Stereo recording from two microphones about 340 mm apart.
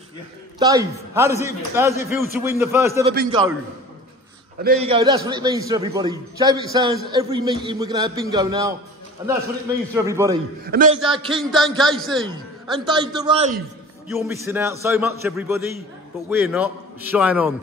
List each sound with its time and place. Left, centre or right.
0.6 s a man's voice: centre
4.6 s a man's voice: centre
9.9 s a man's voice: centre
10.7 s a man's voice: right
11.3 s a man's voice: centre
12.8 s a man's voice: centre
14.0 s a man's voice: centre